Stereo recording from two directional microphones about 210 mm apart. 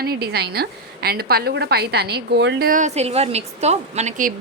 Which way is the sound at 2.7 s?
35° right (ahead or behind).